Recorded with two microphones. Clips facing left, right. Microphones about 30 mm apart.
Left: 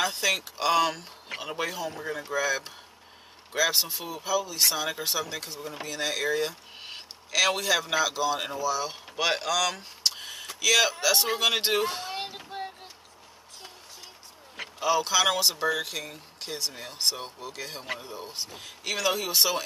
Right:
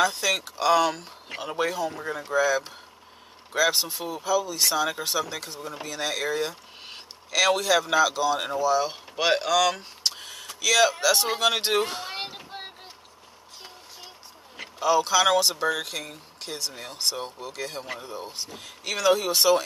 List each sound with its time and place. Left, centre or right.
0.0 s speech: centre
10.1 s a sound: centre
11.3 s speech: centre
12.5 s vehicle: right
14.8 s speech: centre